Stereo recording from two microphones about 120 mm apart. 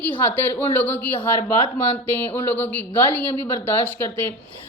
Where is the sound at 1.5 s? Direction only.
50° left (ahead or behind).